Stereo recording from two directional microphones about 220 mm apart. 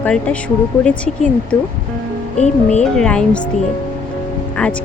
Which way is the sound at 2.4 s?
30° left (ahead or behind).